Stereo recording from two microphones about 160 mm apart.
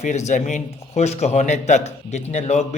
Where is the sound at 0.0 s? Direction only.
45° left (ahead or behind).